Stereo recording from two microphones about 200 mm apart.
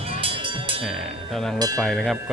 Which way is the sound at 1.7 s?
Centre (ahead or behind).